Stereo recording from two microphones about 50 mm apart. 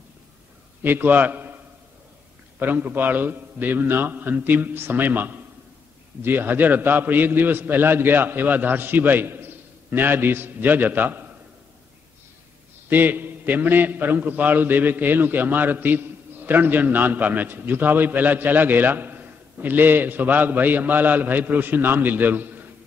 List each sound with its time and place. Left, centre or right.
0.8 s a man's voice: right
2.6 s a man's voice: right
12.9 s a man's voice: right